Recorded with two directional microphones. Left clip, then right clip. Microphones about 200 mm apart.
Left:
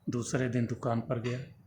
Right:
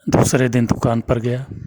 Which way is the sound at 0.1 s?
55° right (ahead or behind).